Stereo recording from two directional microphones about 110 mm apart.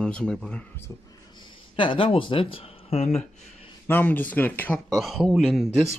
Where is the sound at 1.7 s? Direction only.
50° left (ahead or behind); by 3.2 s 70° left (ahead or behind).